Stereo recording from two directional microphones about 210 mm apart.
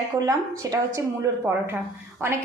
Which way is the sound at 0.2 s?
15° right (ahead or behind).